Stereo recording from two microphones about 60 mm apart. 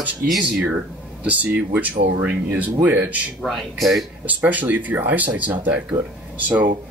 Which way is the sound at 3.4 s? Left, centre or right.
Centre.